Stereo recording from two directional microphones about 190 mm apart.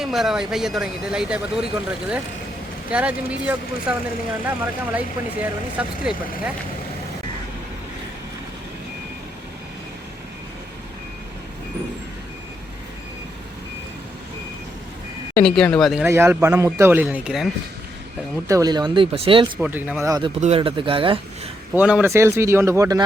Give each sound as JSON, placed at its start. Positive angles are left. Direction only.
{"t": 0.0, "sound": "speech", "side_deg": 0}
{"t": 15.4, "sound": "speech", "side_deg": 5}
{"t": 16.0, "sound": "speech", "side_deg": -15}
{"t": 18.4, "sound": "speech", "side_deg": -20}
{"t": 19.5, "sound": "speech", "side_deg": -5}
{"t": 20.4, "sound": "speech", "side_deg": -30}
{"t": 21.7, "sound": "speech", "side_deg": -5}